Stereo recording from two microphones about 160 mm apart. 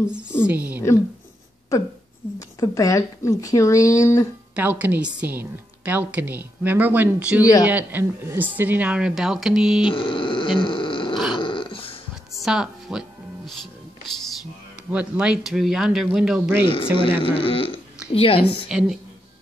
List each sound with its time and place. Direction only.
0.5 s a woman's voice: 10° right (ahead or behind)
2.6 s speech: 20° left (ahead or behind)
4.6 s a woman's voice: 10° right (ahead or behind)
9.8 s grunt: 30° left (ahead or behind)
11.3 s dog: 30° left (ahead or behind)
12.4 s speech: centre (ahead or behind)
14.9 s speech: 5° right (ahead or behind)
16.6 s speech: 30° left (ahead or behind)
18.7 s speech: 5° right (ahead or behind)